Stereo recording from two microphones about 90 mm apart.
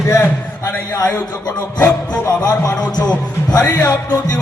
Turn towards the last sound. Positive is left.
turn(degrees=45)  # may be behind; listen again after turning